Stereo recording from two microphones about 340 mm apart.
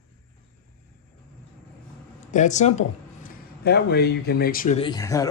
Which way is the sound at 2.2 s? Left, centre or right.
Left.